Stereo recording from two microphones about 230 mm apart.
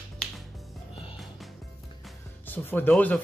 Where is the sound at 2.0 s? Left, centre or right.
Centre.